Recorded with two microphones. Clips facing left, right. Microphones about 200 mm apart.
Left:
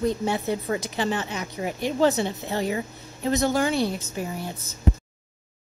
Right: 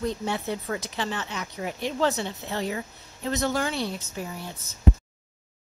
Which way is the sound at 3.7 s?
45° left (ahead or behind).